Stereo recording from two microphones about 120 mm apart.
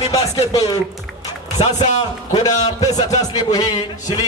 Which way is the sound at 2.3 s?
30° left (ahead or behind).